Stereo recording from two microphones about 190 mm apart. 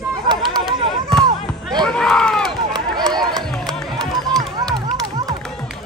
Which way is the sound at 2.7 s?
20° right (ahead or behind).